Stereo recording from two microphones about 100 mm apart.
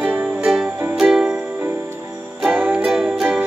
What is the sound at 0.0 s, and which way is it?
Music, 15° right (ahead or behind).